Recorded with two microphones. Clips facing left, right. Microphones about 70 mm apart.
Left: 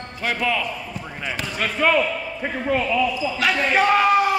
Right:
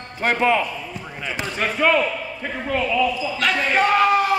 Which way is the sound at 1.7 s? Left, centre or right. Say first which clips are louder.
Even; centre.